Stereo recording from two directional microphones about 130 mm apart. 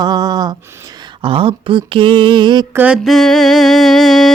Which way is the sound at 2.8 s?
10° right (ahead or behind).